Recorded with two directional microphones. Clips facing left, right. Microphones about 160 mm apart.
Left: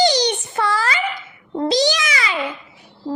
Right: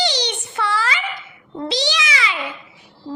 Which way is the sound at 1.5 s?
45° left (ahead or behind).